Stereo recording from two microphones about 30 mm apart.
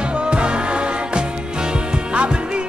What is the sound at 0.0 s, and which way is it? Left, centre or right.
Music, right.